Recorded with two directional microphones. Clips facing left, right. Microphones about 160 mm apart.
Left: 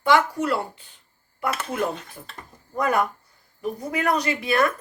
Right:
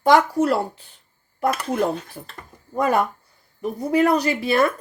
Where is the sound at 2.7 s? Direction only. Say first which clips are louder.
Right 3 dB; 30° right (ahead or behind).